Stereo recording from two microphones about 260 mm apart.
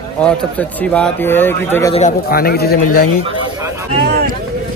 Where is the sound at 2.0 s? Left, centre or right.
Left.